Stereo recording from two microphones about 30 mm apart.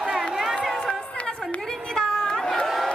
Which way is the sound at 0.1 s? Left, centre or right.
Centre.